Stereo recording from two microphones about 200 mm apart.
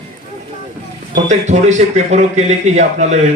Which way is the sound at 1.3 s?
35° right (ahead or behind).